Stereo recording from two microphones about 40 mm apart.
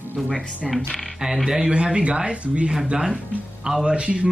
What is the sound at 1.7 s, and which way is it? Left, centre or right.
Speech, right.